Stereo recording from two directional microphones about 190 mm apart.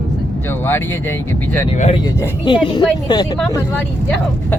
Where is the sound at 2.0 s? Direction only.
20° left (ahead or behind).